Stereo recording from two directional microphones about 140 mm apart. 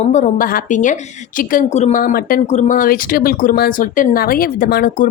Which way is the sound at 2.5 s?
60° left (ahead or behind).